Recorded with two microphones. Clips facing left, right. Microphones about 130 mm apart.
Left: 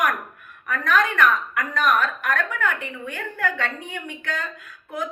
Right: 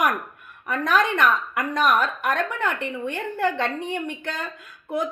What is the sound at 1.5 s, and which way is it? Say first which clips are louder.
A woman's voice: right 1 dB; 25° right (ahead or behind).